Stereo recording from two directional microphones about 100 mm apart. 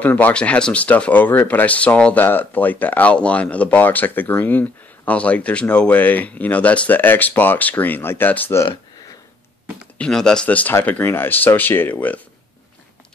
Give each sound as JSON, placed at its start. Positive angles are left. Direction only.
{"t": 0.0, "sound": "speech", "side_deg": 15}
{"t": 9.9, "sound": "speech", "side_deg": 10}